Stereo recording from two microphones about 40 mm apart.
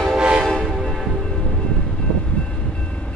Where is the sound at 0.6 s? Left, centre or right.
Centre.